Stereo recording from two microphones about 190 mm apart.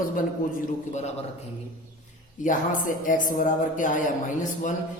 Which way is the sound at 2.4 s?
45° left (ahead or behind).